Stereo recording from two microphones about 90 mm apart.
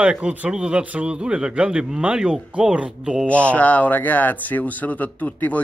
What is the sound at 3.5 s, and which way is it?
Speech, 15° left (ahead or behind).